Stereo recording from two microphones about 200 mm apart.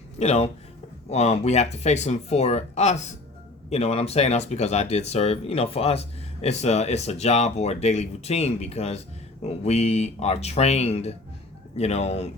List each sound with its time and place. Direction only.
0.2 s speech: 30° left (ahead or behind)